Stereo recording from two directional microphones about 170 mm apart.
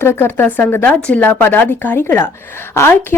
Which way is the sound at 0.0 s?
15° left (ahead or behind).